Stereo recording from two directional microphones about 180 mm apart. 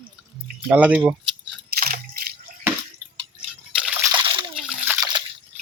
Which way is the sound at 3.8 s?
5° right (ahead or behind).